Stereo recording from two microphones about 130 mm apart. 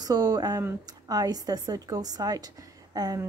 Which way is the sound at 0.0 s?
30° right (ahead or behind).